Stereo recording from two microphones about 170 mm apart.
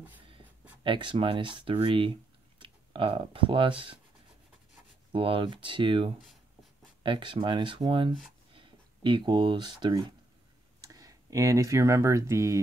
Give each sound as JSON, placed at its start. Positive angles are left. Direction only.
{"t": 0.8, "sound": "speech", "side_deg": -30}
{"t": 5.1, "sound": "speech", "side_deg": -30}